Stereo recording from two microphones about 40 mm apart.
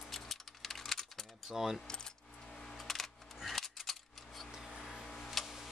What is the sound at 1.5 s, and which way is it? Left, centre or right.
Speech, centre.